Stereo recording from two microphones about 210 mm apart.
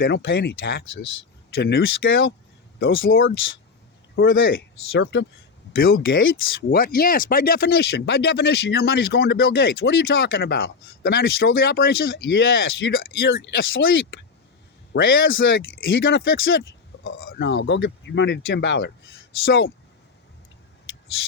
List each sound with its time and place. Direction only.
0.0 s speech: 55° left (ahead or behind)
1.8 s speech: 65° left (ahead or behind)
4.4 s speech: 65° left (ahead or behind)
12.6 s speech: 45° left (ahead or behind); by 14.0 s 65° left (ahead or behind)
15.0 s speech: 65° left (ahead or behind); by 19.7 s 50° left (ahead or behind)